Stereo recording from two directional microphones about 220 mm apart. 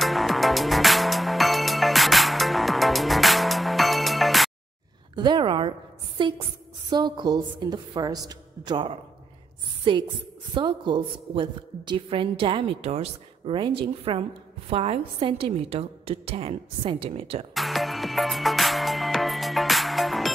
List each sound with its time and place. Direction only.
0.0 s music: centre (ahead or behind)
5.1 s a woman's voice: 20° right (ahead or behind)
17.6 s music: centre (ahead or behind)